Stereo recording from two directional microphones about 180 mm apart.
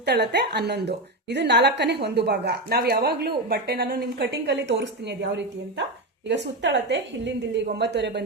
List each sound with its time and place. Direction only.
0.0 s a woman's voice: 65° right (ahead or behind)